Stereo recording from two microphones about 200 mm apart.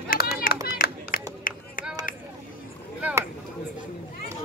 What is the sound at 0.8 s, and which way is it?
Music, 45° left (ahead or behind).